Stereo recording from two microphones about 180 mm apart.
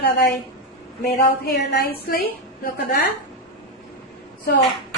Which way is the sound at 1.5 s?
60° left (ahead or behind).